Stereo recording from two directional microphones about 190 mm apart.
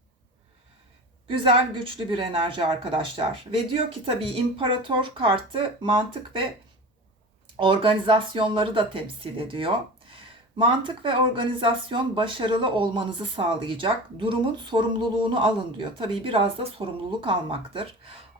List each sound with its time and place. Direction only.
1.3 s speech: 25° right (ahead or behind)
4.5 s speech: 25° right (ahead or behind)
7.6 s speech: 25° right (ahead or behind)